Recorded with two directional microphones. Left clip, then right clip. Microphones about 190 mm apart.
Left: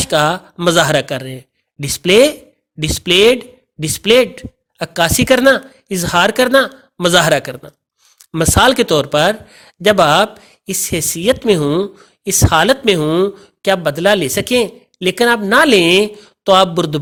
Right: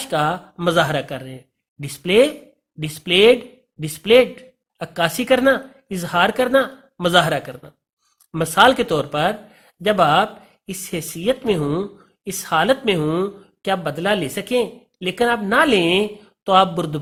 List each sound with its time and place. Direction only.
0.0 s speech: 35° left (ahead or behind)